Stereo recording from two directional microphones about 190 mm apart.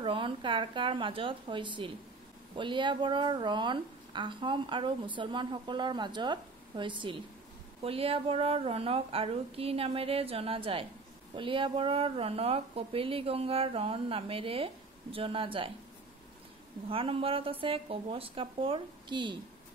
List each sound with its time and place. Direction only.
0.0 s a woman's voice: 25° right (ahead or behind)
16.9 s a woman's voice: 30° right (ahead or behind)